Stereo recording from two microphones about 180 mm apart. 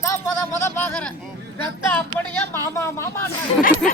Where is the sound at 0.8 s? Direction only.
5° left (ahead or behind).